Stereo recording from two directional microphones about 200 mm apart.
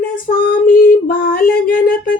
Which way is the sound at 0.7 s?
45° left (ahead or behind).